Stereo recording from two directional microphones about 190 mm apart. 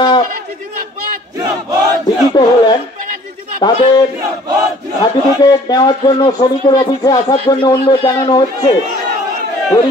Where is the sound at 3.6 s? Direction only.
20° left (ahead or behind).